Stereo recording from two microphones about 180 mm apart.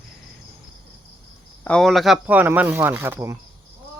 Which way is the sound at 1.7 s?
5° left (ahead or behind).